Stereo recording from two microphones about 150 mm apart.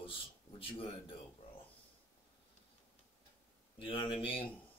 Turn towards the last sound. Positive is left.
turn(degrees=35)  # may be behind; listen again after turning